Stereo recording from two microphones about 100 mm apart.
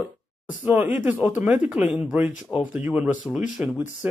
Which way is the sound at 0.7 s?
15° right (ahead or behind).